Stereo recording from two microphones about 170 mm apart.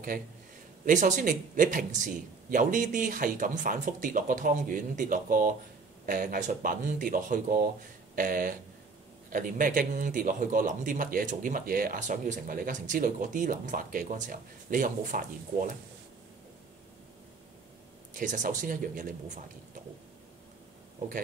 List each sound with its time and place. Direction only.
0.8 s speech: 45° right (ahead or behind)
18.1 s speech: 50° right (ahead or behind)